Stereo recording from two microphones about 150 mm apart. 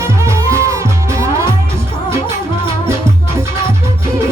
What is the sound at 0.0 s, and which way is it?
Music, 20° right (ahead or behind).